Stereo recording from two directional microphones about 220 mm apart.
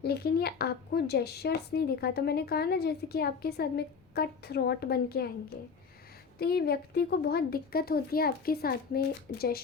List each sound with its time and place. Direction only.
0.0 s speech: 45° left (ahead or behind)
6.4 s speech: 45° left (ahead or behind)